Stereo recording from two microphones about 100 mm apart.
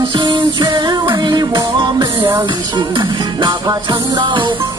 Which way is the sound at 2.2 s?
45° right (ahead or behind).